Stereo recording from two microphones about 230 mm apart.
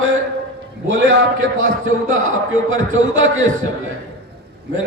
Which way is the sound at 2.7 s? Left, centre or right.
Right.